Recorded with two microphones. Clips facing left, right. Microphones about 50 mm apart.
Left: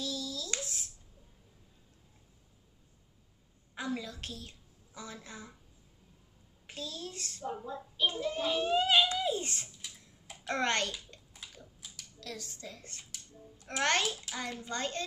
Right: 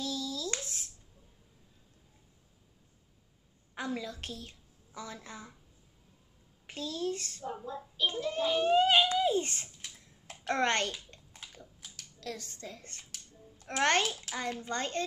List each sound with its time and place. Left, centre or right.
0.0 s a sound: right
4.0 s speech: right
6.7 s a child's voice: right
7.4 s child singing: centre
8.2 s a child's voice: centre
8.5 s a sound: right
14.2 s a child's voice: right